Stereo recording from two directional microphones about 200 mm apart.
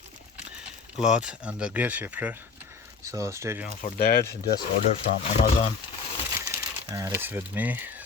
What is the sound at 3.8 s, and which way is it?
Speech, 50° left (ahead or behind).